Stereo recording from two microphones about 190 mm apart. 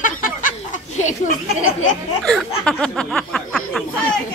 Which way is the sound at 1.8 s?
40° left (ahead or behind).